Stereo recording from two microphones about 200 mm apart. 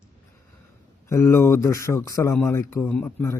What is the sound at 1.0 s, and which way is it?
Speech, 15° left (ahead or behind).